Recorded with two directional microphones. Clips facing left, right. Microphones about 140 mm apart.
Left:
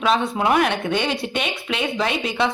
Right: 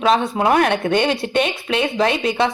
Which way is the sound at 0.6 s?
50° right (ahead or behind).